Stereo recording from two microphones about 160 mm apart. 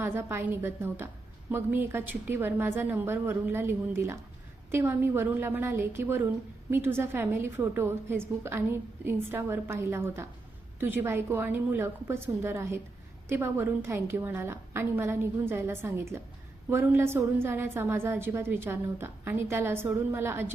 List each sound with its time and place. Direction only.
0.0 s a woman's voice: 15° right (ahead or behind)